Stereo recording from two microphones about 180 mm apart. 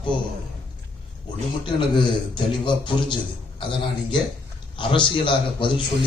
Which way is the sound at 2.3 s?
25° left (ahead or behind).